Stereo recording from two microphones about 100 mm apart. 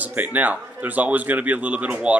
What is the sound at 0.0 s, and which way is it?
Speech, 15° right (ahead or behind).